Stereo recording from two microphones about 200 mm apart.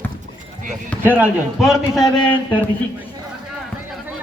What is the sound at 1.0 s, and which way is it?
A man's voice, 5° right (ahead or behind).